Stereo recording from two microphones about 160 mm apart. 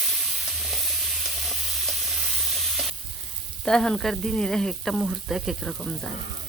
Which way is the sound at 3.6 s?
5° left (ahead or behind).